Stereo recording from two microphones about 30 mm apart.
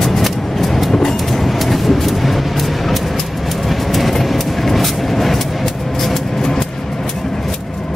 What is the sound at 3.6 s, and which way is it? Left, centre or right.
Vehicle, centre.